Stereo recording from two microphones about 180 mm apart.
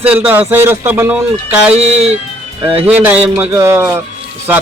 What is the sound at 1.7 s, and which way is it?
Speech, 35° right (ahead or behind).